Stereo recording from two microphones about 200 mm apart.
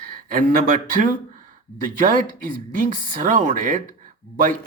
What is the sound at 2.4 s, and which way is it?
Speech, 40° right (ahead or behind).